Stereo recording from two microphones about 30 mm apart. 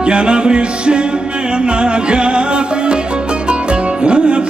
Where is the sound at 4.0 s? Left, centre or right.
Right.